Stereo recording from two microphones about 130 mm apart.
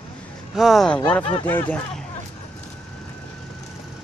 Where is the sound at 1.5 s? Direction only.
15° left (ahead or behind).